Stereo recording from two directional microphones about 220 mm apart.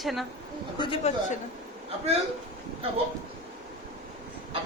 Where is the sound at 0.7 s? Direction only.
25° left (ahead or behind).